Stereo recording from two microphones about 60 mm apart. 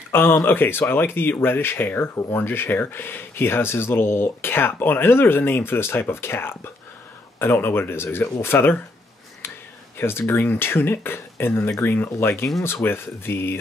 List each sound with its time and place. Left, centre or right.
0.1 s speech: left
9.4 s a sound: left
9.9 s speech: left